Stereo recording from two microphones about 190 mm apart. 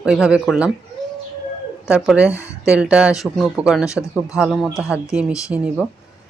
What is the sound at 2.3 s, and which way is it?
Speech, 15° left (ahead or behind).